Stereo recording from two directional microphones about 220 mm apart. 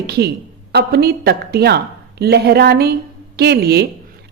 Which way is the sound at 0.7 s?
45° right (ahead or behind).